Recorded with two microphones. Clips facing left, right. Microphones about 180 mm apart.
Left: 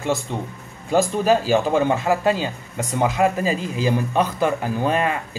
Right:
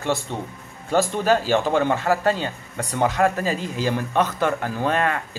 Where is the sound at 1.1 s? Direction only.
15° left (ahead or behind).